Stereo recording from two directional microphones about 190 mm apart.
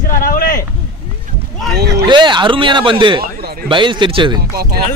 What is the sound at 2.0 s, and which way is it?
Speech, 25° right (ahead or behind).